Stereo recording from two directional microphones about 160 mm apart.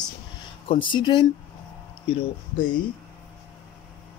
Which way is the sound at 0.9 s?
30° left (ahead or behind).